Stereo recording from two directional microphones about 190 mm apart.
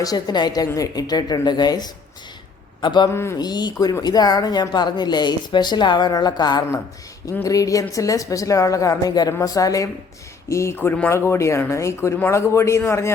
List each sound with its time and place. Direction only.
0.0 s a woman's voice: 20° left (ahead or behind)